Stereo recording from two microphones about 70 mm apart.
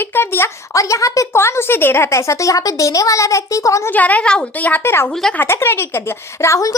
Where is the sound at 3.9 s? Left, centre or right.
Left.